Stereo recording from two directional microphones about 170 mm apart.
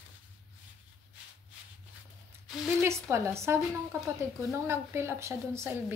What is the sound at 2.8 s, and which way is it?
A woman's voice, 15° right (ahead or behind).